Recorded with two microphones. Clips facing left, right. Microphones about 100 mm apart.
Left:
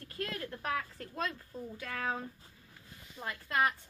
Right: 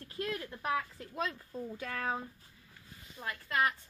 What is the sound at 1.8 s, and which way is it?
Speech, 35° right (ahead or behind).